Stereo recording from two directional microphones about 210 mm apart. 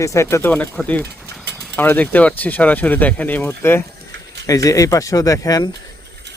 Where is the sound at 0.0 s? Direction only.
15° left (ahead or behind).